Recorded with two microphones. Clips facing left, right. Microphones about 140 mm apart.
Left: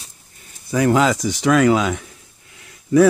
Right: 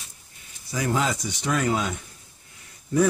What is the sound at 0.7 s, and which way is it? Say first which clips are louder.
Speech: left 9 dB; 65° left (ahead or behind).